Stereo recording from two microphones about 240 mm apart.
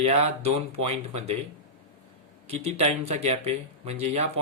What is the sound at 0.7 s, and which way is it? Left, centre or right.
Speech, right.